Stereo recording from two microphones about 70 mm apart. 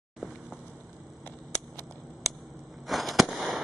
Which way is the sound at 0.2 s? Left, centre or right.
Centre.